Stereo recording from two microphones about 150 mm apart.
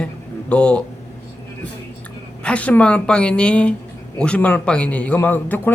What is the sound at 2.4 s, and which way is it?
Speech, 10° left (ahead or behind).